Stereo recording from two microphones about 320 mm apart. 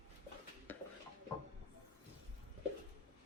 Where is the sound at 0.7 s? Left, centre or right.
Centre.